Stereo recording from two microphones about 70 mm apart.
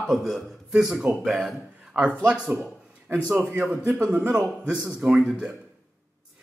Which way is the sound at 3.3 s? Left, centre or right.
Right.